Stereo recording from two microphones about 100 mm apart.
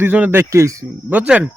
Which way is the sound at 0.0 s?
20° right (ahead or behind).